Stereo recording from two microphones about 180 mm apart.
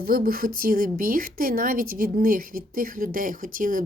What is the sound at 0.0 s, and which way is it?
A woman's voice, 55° right (ahead or behind).